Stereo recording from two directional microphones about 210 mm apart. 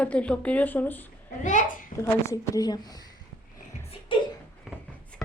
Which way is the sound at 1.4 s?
35° left (ahead or behind).